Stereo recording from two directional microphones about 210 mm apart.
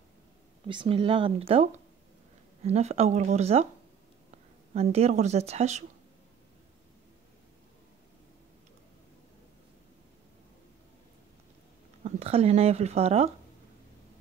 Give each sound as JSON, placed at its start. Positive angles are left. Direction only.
{"t": 0.7, "sound": "speech", "side_deg": -25}
{"t": 4.7, "sound": "speech", "side_deg": -30}
{"t": 12.0, "sound": "speech", "side_deg": -30}